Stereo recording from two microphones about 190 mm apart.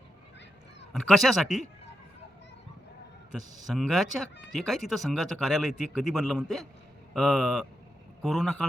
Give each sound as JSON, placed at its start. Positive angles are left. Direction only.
{"t": 0.9, "sound": "a man's voice", "side_deg": 0}
{"t": 3.8, "sound": "a man's voice", "side_deg": 0}